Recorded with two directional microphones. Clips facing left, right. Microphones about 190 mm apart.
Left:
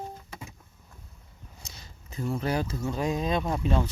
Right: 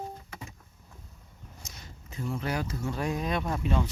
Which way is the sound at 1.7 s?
35° left (ahead or behind).